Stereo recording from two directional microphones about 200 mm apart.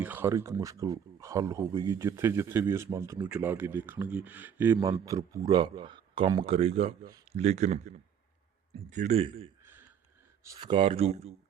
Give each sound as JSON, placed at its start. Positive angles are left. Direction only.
{"t": 0.0, "sound": "a man's voice", "side_deg": -10}
{"t": 10.4, "sound": "a man's voice", "side_deg": -20}